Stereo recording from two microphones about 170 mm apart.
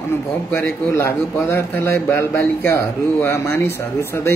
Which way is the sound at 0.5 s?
10° left (ahead or behind).